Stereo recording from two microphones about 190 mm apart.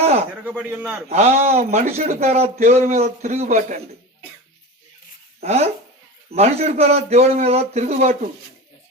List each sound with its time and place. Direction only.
0.0 s a sound: 35° right (ahead or behind)
0.4 s speech: 10° right (ahead or behind)
1.1 s a man's voice: 40° right (ahead or behind)
5.4 s a man's voice: 35° right (ahead or behind)